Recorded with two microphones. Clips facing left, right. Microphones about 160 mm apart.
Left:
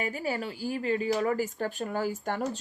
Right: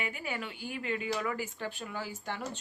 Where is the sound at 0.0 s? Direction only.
40° left (ahead or behind).